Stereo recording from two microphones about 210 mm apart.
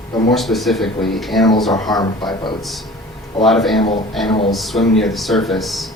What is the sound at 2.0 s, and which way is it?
Speech, 20° left (ahead or behind).